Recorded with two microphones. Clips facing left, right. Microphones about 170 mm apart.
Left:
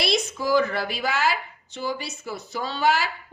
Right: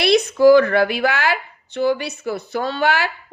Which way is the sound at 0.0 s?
65° right (ahead or behind).